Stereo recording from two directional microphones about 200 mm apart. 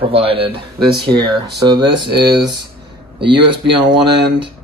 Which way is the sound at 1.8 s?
55° right (ahead or behind).